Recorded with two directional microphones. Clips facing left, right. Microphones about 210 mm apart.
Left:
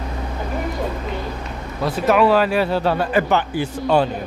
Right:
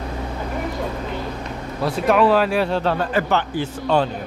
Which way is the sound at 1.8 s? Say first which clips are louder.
Left 1 dB; centre (ahead or behind).